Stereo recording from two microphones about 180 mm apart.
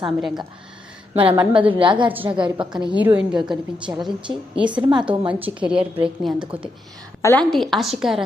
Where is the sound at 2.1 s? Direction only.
10° right (ahead or behind).